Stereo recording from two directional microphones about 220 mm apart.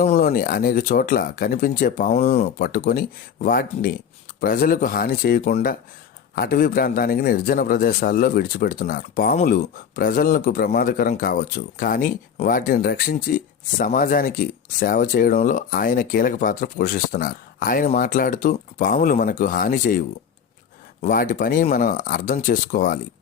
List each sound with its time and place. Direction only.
0.0 s a man's voice: 30° left (ahead or behind)